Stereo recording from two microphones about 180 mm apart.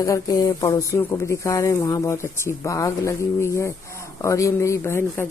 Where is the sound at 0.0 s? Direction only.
20° left (ahead or behind).